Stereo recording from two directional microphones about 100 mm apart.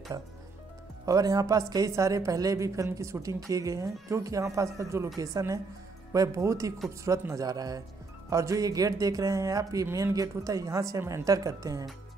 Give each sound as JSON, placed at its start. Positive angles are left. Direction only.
{"t": 1.0, "sound": "speech", "side_deg": -35}